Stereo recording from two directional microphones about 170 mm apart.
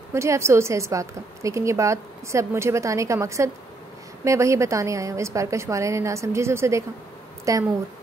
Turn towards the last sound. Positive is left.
turn(degrees=-20)  # may be behind; listen again after turning